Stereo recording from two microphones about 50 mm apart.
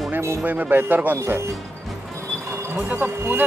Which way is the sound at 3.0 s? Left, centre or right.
Right.